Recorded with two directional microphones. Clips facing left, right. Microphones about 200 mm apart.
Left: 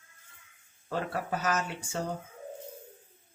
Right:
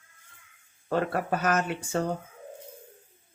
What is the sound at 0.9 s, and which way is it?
Speech, 60° right (ahead or behind).